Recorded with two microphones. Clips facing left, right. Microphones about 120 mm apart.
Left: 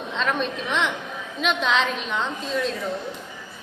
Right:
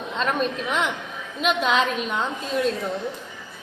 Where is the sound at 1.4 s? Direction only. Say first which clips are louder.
Right 1 dB; 5° right (ahead or behind).